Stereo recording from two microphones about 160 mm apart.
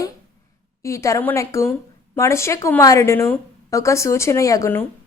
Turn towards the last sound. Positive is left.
turn(degrees=15)  # may be behind; listen again after turning